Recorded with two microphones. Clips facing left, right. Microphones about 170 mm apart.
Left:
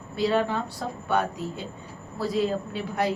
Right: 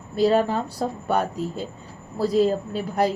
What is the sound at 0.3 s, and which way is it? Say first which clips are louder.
Speech: right 3 dB; 40° right (ahead or behind).